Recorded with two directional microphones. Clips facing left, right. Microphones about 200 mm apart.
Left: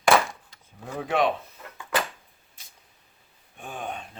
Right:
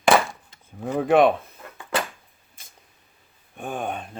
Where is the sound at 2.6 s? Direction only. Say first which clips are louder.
Right 4 dB; 50° right (ahead or behind).